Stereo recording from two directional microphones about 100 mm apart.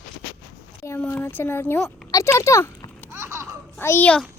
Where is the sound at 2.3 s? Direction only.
30° left (ahead or behind).